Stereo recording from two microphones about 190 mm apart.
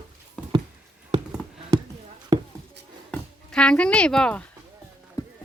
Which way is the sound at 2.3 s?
20° right (ahead or behind).